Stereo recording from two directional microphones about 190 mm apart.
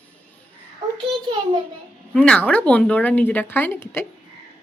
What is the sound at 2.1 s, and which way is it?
Speech, 5° left (ahead or behind).